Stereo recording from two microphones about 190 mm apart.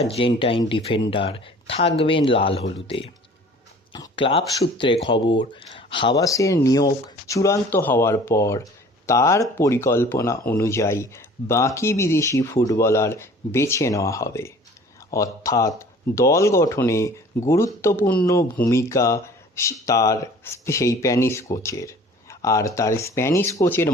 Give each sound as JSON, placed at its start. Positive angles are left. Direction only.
{"t": 0.0, "sound": "speech", "side_deg": 30}
{"t": 18.1, "sound": "speech", "side_deg": 10}